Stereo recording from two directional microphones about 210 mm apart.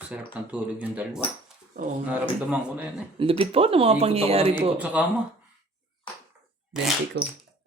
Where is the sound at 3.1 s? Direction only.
25° right (ahead or behind).